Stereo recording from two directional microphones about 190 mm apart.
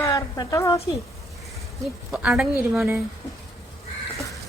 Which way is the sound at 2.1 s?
Centre (ahead or behind).